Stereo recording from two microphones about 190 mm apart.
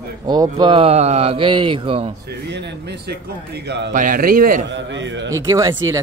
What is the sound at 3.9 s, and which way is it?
Speech, 45° right (ahead or behind).